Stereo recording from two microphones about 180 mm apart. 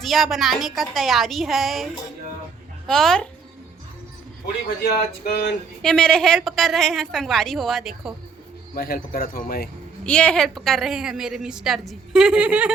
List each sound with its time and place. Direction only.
0.0 s a woman's voice: centre (ahead or behind)
5.2 s a sound: 70° left (ahead or behind)
5.8 s a woman's voice: 5° left (ahead or behind)
8.7 s speech: 55° left (ahead or behind)
10.1 s a woman's voice: 5° left (ahead or behind)